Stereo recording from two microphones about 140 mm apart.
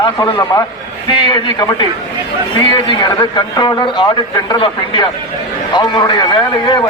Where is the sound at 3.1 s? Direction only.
30° left (ahead or behind).